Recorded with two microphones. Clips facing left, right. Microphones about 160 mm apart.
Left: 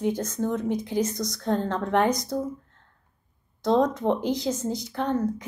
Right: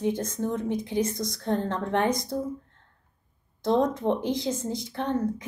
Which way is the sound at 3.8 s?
25° right (ahead or behind).